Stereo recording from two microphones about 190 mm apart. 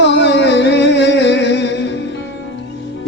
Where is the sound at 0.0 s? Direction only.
65° left (ahead or behind).